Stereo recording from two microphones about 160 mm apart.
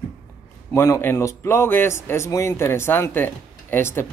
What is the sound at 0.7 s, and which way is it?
Speech, 15° left (ahead or behind).